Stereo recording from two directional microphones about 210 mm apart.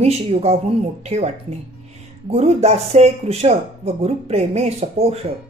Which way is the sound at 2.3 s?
30° right (ahead or behind).